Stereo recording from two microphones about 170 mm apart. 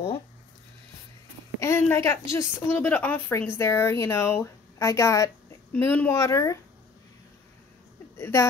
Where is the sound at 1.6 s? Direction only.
15° left (ahead or behind).